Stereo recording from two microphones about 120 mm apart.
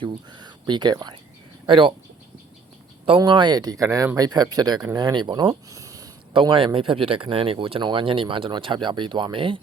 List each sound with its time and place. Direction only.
0.0 s speech: 40° right (ahead or behind)
3.2 s speech: 40° right (ahead or behind)
5.7 s a sound: 30° right (ahead or behind)
6.3 s speech: 45° right (ahead or behind)